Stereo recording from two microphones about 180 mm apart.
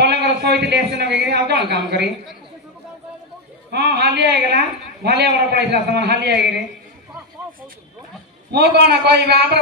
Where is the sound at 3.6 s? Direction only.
65° right (ahead or behind).